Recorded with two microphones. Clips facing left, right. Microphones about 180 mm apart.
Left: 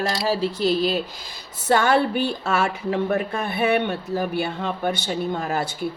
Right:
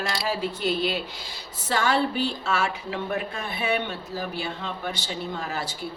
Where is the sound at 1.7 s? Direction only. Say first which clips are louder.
Left 5 dB; 55° left (ahead or behind).